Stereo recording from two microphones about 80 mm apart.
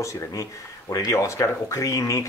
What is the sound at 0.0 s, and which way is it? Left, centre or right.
Speech, left.